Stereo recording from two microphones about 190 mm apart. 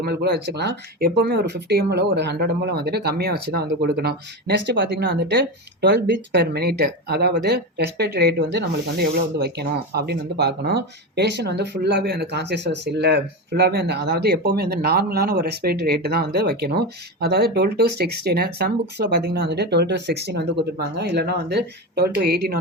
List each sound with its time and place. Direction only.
0.0 s speech: 55° right (ahead or behind)